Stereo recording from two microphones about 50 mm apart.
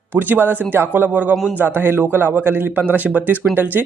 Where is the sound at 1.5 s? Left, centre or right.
Right.